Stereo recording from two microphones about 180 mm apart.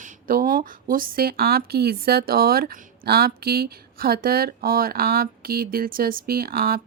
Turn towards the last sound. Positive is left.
turn(degrees=-55)  # may be behind; listen again after turning